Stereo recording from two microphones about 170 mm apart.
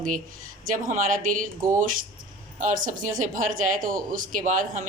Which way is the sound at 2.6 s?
50° right (ahead or behind).